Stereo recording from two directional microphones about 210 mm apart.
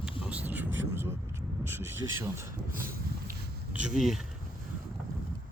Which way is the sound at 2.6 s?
40° right (ahead or behind).